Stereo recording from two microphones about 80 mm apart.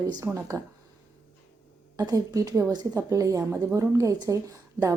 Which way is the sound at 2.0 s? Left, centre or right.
Right.